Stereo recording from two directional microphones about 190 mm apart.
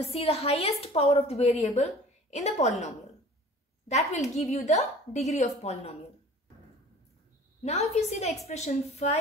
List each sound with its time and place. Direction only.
0.0 s a woman's voice: 30° left (ahead or behind)
3.9 s a woman's voice: 35° left (ahead or behind)
7.6 s a woman's voice: 35° left (ahead or behind)